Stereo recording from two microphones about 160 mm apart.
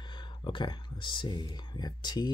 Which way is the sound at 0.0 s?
30° left (ahead or behind).